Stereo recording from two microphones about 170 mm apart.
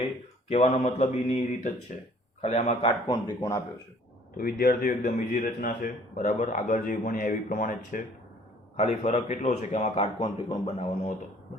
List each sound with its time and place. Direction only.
0.4 s a man's voice: 40° left (ahead or behind)
3.1 s speech: 20° left (ahead or behind)
4.4 s speech: 60° left (ahead or behind)
8.7 s a man's voice: 40° left (ahead or behind)